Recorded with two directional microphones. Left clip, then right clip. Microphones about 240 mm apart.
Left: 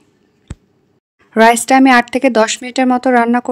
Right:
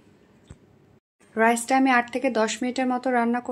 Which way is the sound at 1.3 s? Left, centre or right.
Left.